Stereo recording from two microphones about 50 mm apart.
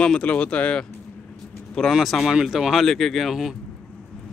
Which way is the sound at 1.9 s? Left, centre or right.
Centre.